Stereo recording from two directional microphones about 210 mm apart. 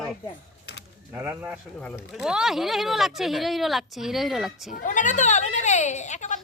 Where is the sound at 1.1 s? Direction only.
10° right (ahead or behind).